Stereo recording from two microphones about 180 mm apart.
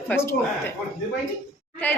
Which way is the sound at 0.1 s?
15° left (ahead or behind).